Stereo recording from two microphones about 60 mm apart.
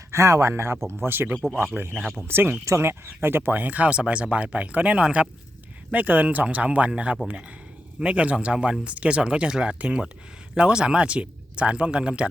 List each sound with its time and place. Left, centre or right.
0.1 s speech: right
3.1 s speech: right; by 12.3 s centre